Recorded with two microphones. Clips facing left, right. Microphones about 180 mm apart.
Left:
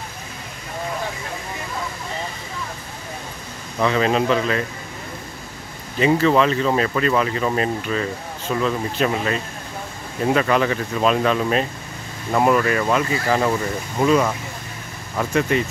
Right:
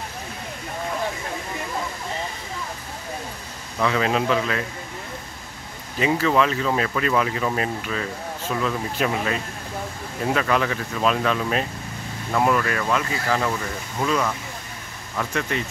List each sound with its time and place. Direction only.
3.9 s speech: 5° right (ahead or behind)
5.9 s speech: 5° right (ahead or behind); by 15.6 s 10° left (ahead or behind)